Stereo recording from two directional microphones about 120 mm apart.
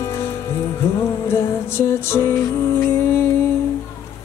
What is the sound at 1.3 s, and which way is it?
Music, 20° left (ahead or behind).